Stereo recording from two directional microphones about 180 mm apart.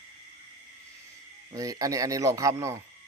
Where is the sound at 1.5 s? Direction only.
20° right (ahead or behind).